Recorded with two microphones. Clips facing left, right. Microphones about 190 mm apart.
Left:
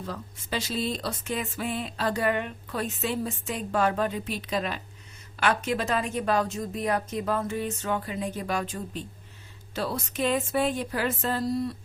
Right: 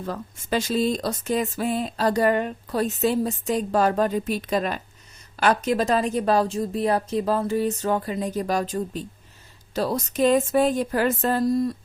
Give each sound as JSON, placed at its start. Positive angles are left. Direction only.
{"t": 0.0, "sound": "speech", "side_deg": -50}